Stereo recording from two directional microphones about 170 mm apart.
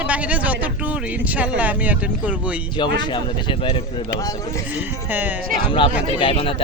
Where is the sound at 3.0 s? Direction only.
25° left (ahead or behind).